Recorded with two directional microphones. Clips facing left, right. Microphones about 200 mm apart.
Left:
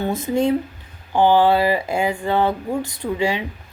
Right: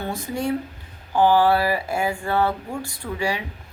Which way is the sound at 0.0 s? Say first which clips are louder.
Left 7 dB; 20° left (ahead or behind).